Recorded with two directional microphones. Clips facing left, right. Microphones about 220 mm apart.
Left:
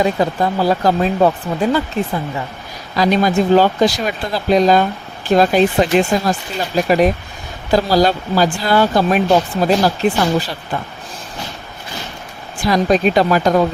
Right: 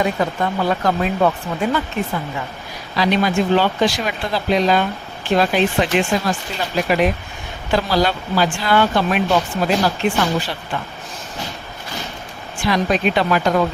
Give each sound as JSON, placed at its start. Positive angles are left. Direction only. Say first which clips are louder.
{"t": 0.0, "sound": "speech", "louder": "left 3 dB", "side_deg": 35}
{"t": 2.9, "sound": "speech", "louder": "left 3 dB", "side_deg": 40}
{"t": 12.5, "sound": "speech", "louder": "left 4 dB", "side_deg": 40}